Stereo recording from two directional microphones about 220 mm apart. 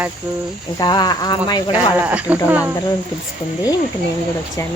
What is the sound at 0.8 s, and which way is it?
Cricket, 20° left (ahead or behind).